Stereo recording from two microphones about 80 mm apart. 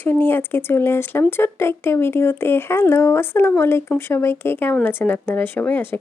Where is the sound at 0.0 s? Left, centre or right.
Left.